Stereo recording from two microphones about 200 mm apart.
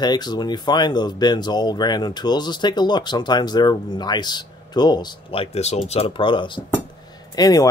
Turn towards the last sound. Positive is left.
turn(degrees=20)  # may be behind; listen again after turning